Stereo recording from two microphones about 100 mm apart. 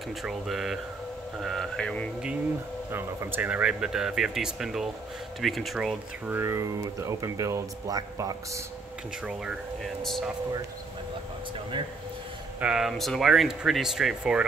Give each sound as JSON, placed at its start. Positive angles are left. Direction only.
{"t": 0.2, "sound": "speech", "side_deg": -5}
{"t": 2.9, "sound": "speech", "side_deg": -25}
{"t": 3.4, "sound": "speech", "side_deg": -10}
{"t": 6.2, "sound": "speech", "side_deg": -20}
{"t": 10.0, "sound": "speech", "side_deg": 0}
{"t": 12.5, "sound": "speech", "side_deg": -10}